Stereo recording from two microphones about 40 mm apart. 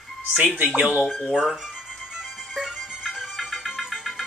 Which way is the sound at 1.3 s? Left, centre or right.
Centre.